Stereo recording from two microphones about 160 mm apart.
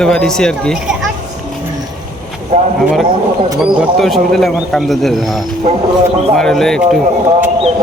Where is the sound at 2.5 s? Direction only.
50° right (ahead or behind).